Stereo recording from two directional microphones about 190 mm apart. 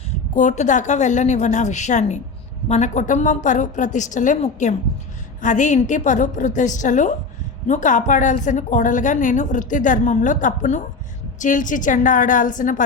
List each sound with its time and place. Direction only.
0.3 s a woman's voice: 40° left (ahead or behind)